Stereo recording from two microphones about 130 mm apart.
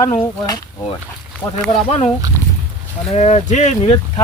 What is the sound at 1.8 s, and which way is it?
Speech, 50° left (ahead or behind).